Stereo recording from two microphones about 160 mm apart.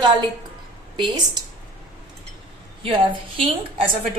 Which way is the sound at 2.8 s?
35° right (ahead or behind).